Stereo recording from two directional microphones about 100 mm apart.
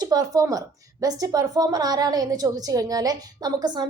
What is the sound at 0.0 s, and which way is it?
A woman's voice, 40° right (ahead or behind).